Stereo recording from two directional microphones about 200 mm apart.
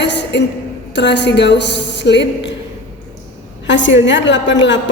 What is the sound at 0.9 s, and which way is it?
A woman's voice, 60° left (ahead or behind).